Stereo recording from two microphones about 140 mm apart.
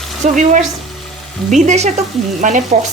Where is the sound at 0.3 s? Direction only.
60° right (ahead or behind).